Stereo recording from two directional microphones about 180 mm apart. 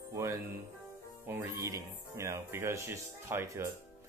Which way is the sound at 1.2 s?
15° right (ahead or behind).